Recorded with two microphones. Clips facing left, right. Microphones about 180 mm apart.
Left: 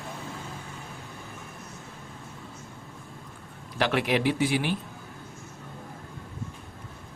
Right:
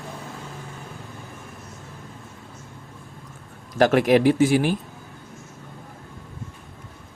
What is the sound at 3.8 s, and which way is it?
Speech, 45° right (ahead or behind).